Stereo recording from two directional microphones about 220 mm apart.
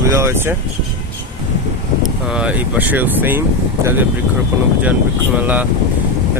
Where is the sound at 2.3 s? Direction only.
5° right (ahead or behind).